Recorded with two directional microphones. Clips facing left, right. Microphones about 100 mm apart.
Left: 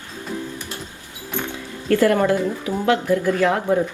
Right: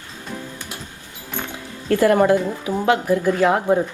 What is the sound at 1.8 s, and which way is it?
Speech, 20° right (ahead or behind).